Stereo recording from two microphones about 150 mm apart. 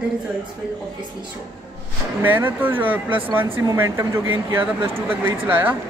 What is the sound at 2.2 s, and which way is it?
Speech, 15° right (ahead or behind).